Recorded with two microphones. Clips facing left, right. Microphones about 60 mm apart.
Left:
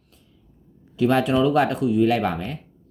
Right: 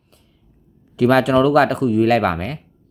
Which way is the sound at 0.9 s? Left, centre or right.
Right.